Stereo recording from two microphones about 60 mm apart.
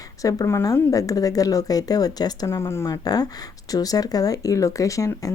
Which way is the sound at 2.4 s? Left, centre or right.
Left.